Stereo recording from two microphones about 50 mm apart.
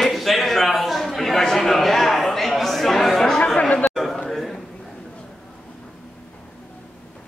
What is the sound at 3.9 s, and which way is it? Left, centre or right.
Chatter, centre.